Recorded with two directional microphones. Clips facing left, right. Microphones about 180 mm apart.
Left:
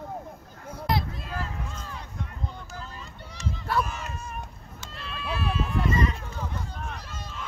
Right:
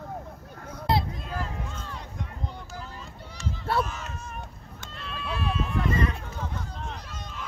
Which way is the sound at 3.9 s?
10° left (ahead or behind).